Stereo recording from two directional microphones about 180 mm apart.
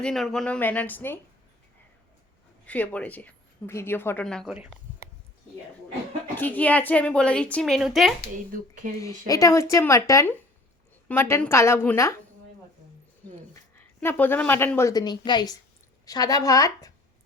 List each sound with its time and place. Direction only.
0.0 s a woman's voice: centre (ahead or behind)
2.6 s a woman's voice: 10° left (ahead or behind)
6.3 s a woman's voice: 10° left (ahead or behind)
8.5 s speech: 45° right (ahead or behind)
9.0 s a woman's voice: 20° left (ahead or behind)
13.7 s a woman's voice: 10° left (ahead or behind)